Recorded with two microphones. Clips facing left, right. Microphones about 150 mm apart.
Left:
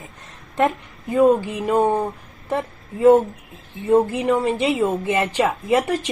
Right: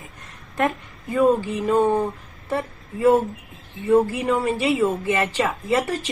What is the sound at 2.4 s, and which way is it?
A woman's voice, 20° left (ahead or behind).